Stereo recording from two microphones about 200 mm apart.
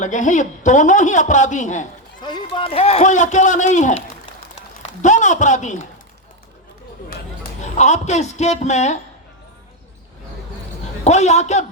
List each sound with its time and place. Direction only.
0.0 s a man's voice: 40° left (ahead or behind)
2.2 s a man's voice: 20° left (ahead or behind); by 5.9 s 40° left (ahead or behind)
7.6 s a man's voice: 35° left (ahead or behind)
11.0 s a man's voice: 35° left (ahead or behind)